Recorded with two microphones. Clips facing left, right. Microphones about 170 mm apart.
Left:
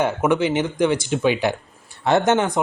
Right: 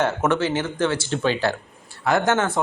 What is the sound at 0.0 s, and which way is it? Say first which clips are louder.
A man's voice: left 2 dB; 10° left (ahead or behind).